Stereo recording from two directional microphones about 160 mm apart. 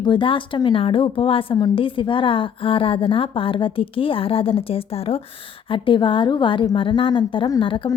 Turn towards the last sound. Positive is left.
turn(degrees=30)  # may be behind; listen again after turning